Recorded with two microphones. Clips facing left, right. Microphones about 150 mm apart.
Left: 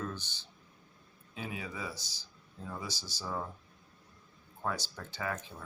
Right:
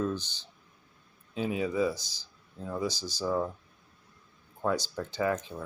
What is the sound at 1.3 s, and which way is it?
Speech, 20° right (ahead or behind).